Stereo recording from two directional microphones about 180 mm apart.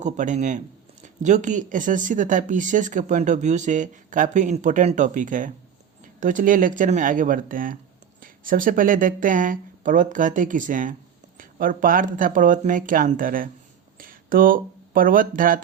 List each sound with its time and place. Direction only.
0.0 s speech: 40° right (ahead or behind)